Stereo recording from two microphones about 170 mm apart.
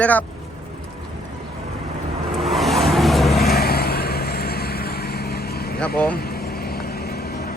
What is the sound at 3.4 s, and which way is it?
Vehicle, 65° left (ahead or behind).